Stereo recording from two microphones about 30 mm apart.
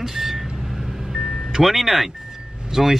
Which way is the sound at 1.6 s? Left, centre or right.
Centre.